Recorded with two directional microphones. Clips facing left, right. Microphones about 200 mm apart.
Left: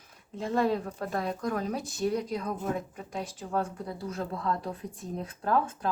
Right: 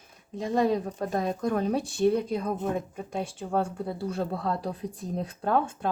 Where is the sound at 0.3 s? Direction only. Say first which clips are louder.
Right 2 dB; 15° right (ahead or behind).